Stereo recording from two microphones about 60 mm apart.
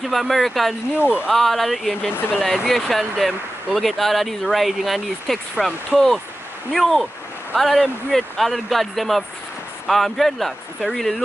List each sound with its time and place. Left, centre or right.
0.0 s speech: centre
0.9 s speech: right
1.3 s speech: centre